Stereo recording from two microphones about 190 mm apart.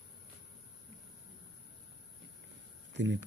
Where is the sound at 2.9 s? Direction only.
70° right (ahead or behind).